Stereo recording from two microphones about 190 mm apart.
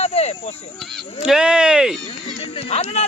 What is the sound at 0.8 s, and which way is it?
Speech, centre (ahead or behind).